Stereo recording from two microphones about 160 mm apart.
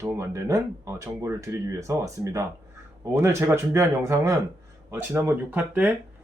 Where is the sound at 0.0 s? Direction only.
15° right (ahead or behind).